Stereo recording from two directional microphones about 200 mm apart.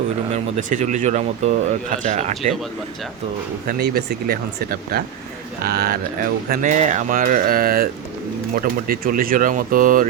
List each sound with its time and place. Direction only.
0.3 s speech: 35° right (ahead or behind)
3.7 s speech: 50° right (ahead or behind)